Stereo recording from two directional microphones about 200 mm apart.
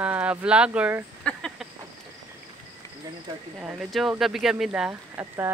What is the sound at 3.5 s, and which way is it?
Speech, 5° right (ahead or behind).